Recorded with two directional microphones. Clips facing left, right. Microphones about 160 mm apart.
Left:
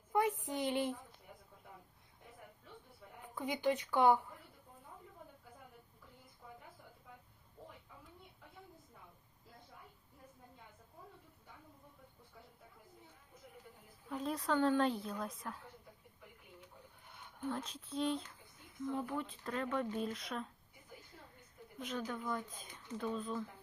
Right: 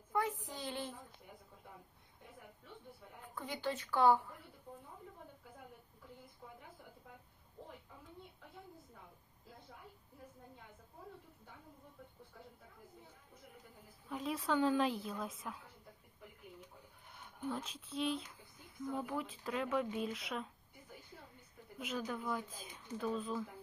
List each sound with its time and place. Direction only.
0.1 s a woman's voice: 20° left (ahead or behind)
3.3 s speech: 15° left (ahead or behind)
14.1 s speech: centre (ahead or behind)
17.7 s speech: centre (ahead or behind)
21.8 s speech: 5° right (ahead or behind)